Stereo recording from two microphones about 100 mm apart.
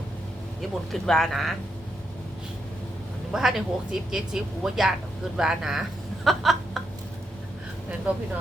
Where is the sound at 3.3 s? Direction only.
5° right (ahead or behind).